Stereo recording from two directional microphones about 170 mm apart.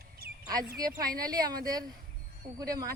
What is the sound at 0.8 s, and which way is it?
A woman's voice, 20° right (ahead or behind).